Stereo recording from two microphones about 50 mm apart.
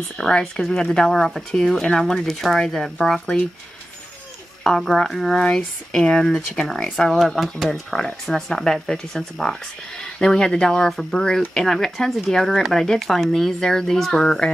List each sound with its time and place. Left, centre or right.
0.2 s speech: centre
4.6 s speech: centre